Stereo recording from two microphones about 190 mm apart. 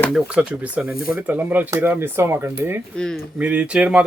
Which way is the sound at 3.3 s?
5° right (ahead or behind).